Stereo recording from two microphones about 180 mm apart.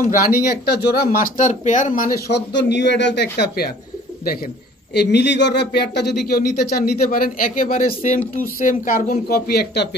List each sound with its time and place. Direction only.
0.0 s speech: 50° left (ahead or behind)
2.2 s speech: 70° left (ahead or behind)
4.9 s speech: 70° left (ahead or behind)